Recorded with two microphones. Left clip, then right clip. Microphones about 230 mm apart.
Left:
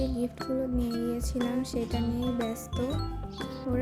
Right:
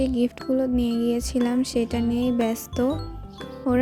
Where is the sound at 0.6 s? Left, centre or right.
Right.